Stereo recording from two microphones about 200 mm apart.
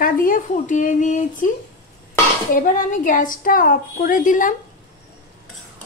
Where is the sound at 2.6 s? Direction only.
40° left (ahead or behind).